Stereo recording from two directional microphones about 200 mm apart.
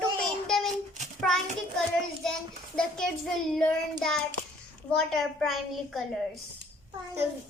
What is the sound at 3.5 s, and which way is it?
Child singing, 5° left (ahead or behind).